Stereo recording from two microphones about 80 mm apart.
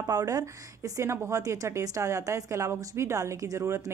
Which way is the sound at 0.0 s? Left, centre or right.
Right.